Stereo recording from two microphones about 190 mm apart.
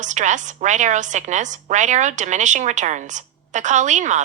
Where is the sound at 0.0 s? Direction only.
40° right (ahead or behind).